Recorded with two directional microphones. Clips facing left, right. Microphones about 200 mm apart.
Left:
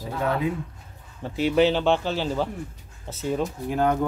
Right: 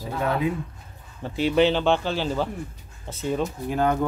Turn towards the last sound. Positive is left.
turn(degrees=5)  # may be behind; listen again after turning